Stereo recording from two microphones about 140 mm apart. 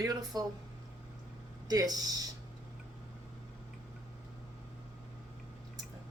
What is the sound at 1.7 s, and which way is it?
Speech, 25° right (ahead or behind).